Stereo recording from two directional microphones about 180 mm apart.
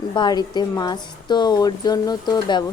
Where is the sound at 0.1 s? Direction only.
25° left (ahead or behind).